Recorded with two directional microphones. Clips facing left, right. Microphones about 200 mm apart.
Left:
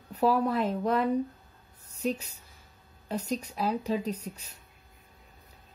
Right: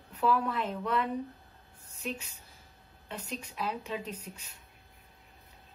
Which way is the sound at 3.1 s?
40° left (ahead or behind).